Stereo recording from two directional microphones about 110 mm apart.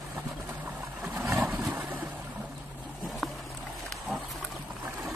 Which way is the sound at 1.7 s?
15° right (ahead or behind).